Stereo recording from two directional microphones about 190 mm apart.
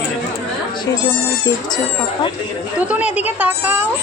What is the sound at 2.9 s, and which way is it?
Speech, 5° right (ahead or behind).